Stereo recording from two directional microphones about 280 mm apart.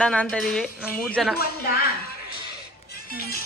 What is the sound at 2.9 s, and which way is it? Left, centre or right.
Music, left.